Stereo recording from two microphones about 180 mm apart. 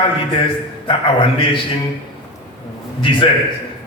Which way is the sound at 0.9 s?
30° left (ahead or behind).